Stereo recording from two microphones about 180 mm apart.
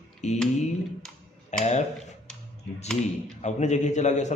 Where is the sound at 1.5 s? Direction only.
40° left (ahead or behind).